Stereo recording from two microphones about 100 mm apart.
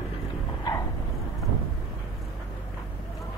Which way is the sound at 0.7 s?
50° left (ahead or behind).